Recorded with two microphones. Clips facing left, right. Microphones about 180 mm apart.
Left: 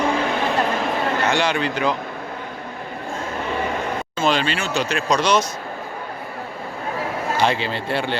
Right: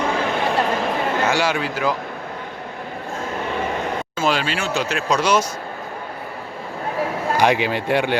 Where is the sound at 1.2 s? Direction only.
5° right (ahead or behind).